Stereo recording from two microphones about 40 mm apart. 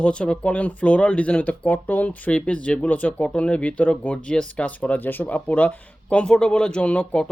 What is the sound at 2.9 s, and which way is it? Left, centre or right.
Speech, left.